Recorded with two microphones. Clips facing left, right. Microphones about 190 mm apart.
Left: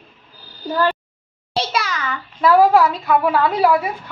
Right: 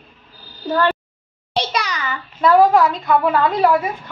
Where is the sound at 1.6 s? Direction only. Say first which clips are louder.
Even; 5° left (ahead or behind).